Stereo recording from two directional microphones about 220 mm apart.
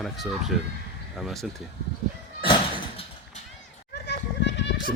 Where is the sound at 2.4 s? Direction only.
20° left (ahead or behind).